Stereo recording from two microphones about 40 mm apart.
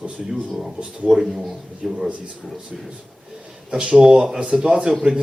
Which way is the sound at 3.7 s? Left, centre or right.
Centre.